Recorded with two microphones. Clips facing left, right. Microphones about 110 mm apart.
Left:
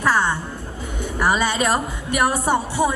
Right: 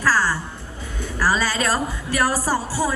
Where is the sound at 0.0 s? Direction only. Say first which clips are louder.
Left 1 dB; 25° left (ahead or behind).